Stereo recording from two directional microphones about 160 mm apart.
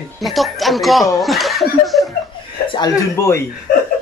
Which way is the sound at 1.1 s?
Centre (ahead or behind).